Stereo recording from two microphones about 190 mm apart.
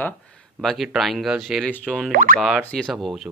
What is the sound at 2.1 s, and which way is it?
Speech, 45° right (ahead or behind).